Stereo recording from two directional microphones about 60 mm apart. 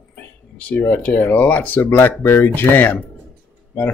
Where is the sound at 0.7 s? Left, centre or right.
Left.